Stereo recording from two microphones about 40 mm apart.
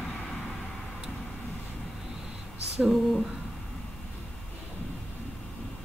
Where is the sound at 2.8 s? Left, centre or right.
Centre.